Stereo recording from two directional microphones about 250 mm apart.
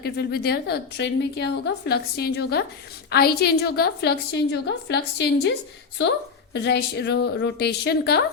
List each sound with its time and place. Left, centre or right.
0.0 s a woman's voice: left